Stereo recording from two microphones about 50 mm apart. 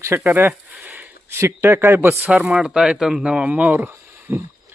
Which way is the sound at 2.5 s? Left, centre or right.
Centre.